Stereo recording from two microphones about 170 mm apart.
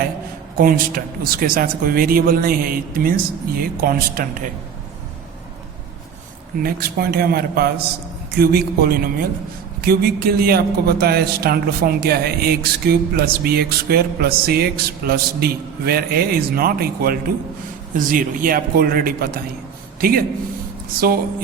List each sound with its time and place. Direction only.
0.5 s a man's voice: 60° right (ahead or behind)
6.6 s a man's voice: 60° right (ahead or behind)
17.9 s a man's voice: 55° right (ahead or behind)